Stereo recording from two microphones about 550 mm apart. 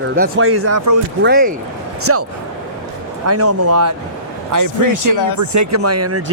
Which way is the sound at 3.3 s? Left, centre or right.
Right.